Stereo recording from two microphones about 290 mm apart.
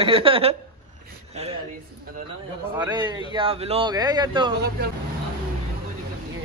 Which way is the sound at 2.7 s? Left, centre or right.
Centre.